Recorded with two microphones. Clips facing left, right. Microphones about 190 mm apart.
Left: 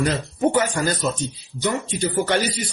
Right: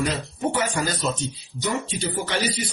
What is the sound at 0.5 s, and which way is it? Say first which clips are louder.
Speech: left 4 dB; 50° left (ahead or behind).